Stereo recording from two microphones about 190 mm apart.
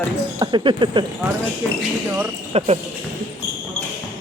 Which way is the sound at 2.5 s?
35° right (ahead or behind).